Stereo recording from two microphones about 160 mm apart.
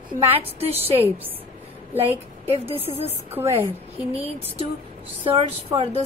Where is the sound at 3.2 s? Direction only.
15° right (ahead or behind).